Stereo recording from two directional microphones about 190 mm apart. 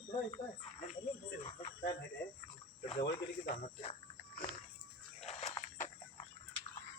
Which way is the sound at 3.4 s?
35° left (ahead or behind).